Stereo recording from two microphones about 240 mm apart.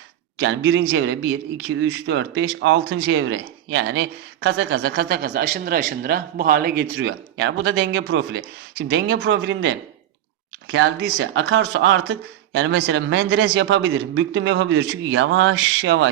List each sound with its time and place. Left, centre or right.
0.3 s speech: right